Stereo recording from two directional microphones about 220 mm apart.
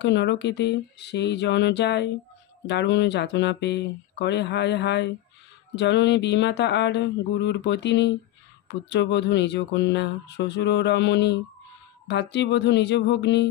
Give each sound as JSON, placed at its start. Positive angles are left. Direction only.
{"t": 0.0, "sound": "speech", "side_deg": 50}